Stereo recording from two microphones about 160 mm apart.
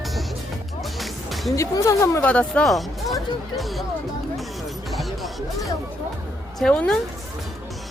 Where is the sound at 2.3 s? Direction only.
5° left (ahead or behind).